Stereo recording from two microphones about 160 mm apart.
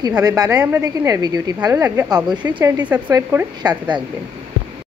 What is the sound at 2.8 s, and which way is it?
Speech, 10° right (ahead or behind).